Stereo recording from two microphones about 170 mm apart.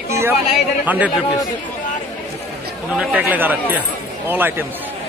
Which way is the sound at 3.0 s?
10° right (ahead or behind).